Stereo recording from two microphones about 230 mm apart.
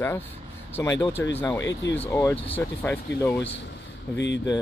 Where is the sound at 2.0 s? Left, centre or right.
Centre.